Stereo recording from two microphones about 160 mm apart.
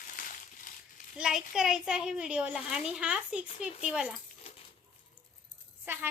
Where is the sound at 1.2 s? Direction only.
5° right (ahead or behind).